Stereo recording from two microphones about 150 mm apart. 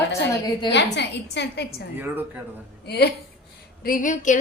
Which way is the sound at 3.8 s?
65° left (ahead or behind).